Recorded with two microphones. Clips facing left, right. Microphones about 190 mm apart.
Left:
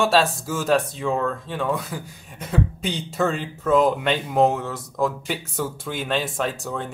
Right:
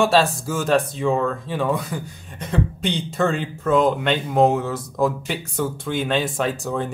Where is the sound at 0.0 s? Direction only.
Centre (ahead or behind).